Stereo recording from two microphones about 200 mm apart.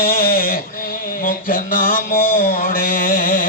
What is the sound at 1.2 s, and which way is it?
Mantra, 45° left (ahead or behind).